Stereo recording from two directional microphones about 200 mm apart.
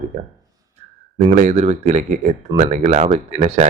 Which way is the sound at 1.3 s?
40° right (ahead or behind).